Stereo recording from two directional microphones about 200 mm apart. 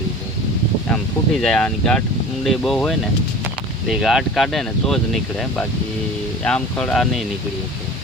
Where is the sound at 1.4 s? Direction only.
5° left (ahead or behind).